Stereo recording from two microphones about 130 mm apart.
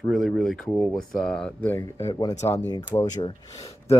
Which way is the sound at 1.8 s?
25° left (ahead or behind).